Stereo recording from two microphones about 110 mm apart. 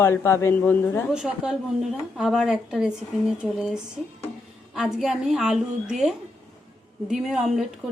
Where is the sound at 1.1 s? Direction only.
5° right (ahead or behind).